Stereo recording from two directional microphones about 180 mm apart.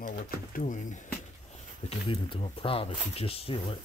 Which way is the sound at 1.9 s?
30° left (ahead or behind).